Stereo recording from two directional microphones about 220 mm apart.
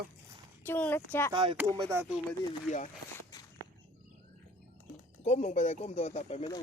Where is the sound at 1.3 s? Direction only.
25° right (ahead or behind).